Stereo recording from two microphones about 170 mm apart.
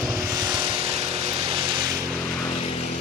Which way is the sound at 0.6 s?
30° right (ahead or behind).